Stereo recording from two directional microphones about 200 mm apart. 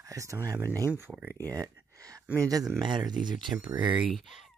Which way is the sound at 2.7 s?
20° right (ahead or behind).